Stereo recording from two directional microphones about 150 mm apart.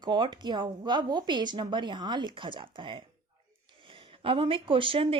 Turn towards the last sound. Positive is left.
turn(degrees=-35)  # may be behind; listen again after turning